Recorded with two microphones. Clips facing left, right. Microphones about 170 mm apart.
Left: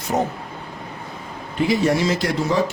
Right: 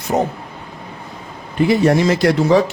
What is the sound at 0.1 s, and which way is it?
Speech, 85° right.